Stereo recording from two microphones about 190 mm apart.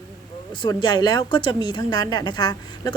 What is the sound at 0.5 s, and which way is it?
A woman's voice, 25° left (ahead or behind).